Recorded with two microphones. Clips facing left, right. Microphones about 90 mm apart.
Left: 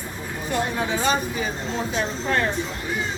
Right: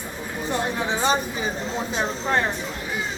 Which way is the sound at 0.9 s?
25° right (ahead or behind).